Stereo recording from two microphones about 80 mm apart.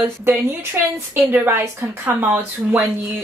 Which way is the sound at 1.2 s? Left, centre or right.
Right.